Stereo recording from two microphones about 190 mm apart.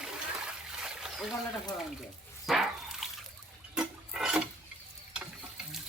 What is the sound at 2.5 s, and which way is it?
Dog, centre (ahead or behind).